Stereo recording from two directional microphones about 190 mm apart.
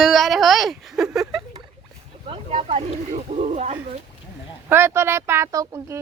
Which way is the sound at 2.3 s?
30° right (ahead or behind).